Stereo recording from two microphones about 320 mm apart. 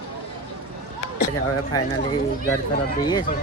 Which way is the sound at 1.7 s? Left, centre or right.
Centre.